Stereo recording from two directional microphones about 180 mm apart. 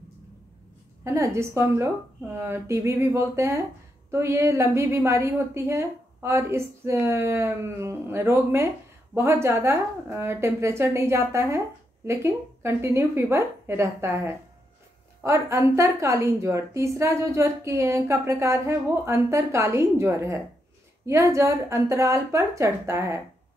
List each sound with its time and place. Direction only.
1.0 s a woman's voice: 15° right (ahead or behind)